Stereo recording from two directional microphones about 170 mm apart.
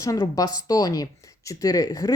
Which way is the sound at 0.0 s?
20° left (ahead or behind).